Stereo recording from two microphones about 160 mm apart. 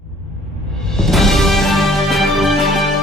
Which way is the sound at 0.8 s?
5° left (ahead or behind).